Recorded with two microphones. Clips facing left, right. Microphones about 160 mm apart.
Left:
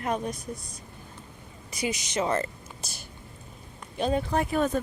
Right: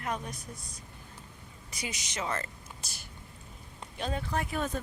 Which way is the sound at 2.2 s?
25° left (ahead or behind).